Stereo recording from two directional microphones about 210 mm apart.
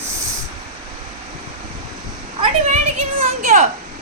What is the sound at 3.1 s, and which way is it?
Speech, 30° right (ahead or behind).